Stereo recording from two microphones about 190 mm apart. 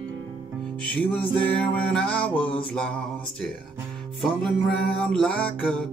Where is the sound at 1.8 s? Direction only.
5° left (ahead or behind).